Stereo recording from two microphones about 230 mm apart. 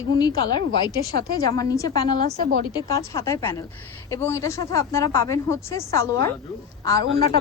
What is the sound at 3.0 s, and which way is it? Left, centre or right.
A woman's voice, centre.